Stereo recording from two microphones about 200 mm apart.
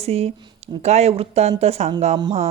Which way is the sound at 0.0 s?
30° right (ahead or behind).